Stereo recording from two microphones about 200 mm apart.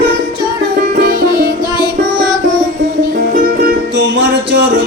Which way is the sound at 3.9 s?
60° right (ahead or behind).